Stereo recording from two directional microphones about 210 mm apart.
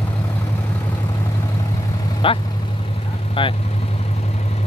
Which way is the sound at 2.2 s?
25° left (ahead or behind).